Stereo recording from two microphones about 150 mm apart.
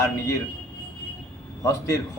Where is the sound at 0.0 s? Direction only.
20° left (ahead or behind).